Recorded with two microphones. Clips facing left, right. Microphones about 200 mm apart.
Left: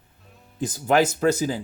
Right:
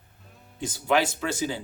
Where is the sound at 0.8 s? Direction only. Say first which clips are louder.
Left 5 dB; 45° left (ahead or behind).